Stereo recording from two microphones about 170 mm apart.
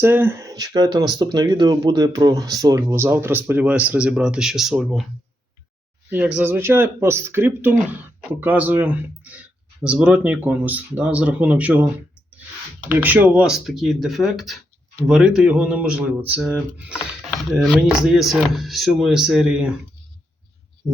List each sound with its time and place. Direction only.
0.0 s speech: 15° right (ahead or behind)
6.1 s speech: 10° right (ahead or behind)
12.9 s speech: 10° right (ahead or behind)